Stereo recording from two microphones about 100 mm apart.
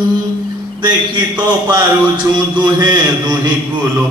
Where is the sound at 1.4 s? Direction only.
45° right (ahead or behind).